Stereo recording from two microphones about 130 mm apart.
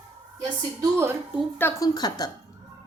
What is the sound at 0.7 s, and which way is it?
Speech, 25° right (ahead or behind).